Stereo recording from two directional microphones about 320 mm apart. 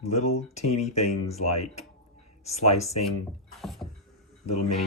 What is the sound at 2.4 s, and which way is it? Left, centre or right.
Speech, centre.